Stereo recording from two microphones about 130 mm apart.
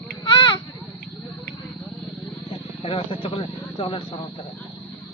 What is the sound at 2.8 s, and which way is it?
Speech, 45° left (ahead or behind).